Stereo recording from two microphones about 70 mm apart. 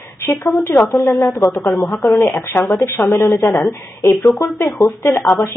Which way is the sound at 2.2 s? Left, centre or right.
Left.